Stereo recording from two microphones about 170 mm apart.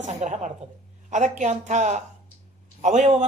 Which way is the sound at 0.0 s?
45° right (ahead or behind).